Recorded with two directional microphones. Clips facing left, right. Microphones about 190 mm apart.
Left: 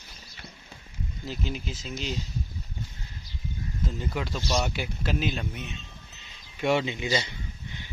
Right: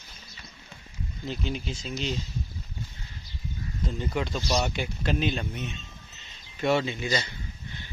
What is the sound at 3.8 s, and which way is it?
Speech, centre (ahead or behind).